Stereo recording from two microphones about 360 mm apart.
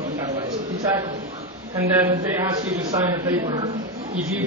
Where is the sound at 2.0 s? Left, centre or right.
Centre.